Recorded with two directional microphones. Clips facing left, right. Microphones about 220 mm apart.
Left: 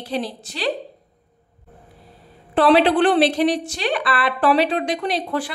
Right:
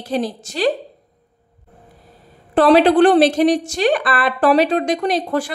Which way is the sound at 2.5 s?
45° right (ahead or behind).